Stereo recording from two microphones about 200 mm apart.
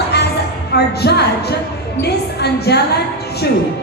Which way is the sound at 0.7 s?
55° left (ahead or behind).